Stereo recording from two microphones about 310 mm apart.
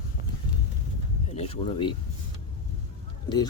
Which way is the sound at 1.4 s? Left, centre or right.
Centre.